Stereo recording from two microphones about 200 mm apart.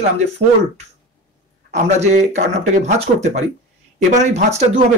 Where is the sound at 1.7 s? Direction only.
35° right (ahead or behind).